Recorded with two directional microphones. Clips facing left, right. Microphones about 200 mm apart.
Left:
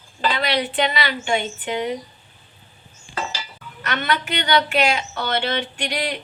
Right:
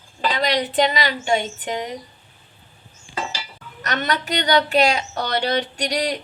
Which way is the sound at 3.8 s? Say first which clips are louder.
Even; 40° right (ahead or behind).